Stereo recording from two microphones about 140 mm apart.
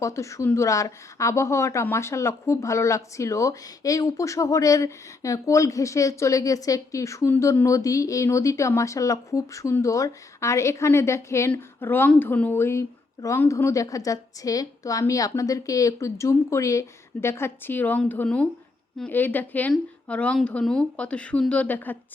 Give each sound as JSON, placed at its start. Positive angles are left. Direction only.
{"t": 0.0, "sound": "speech", "side_deg": 20}